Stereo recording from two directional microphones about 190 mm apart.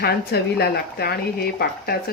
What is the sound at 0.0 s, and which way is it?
A woman's voice, 55° left (ahead or behind).